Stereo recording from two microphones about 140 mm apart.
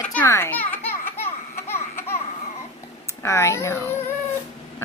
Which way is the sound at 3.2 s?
20° left (ahead or behind).